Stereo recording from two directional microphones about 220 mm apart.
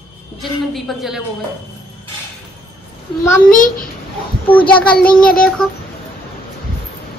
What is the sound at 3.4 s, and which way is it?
Speech, 40° left (ahead or behind).